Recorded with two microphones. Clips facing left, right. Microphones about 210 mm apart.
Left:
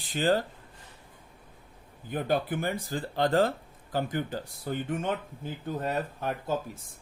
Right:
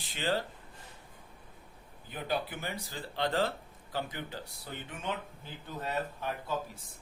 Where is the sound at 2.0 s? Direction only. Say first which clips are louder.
Left 7 dB; 50° left (ahead or behind).